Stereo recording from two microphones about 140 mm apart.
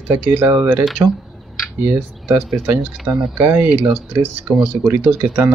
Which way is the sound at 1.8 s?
15° right (ahead or behind).